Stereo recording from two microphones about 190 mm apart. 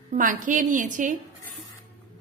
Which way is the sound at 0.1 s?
45° right (ahead or behind).